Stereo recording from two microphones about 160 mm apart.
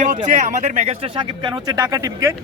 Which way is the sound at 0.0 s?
55° right (ahead or behind).